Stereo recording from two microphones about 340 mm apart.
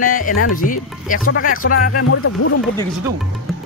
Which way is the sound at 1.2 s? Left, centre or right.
Left.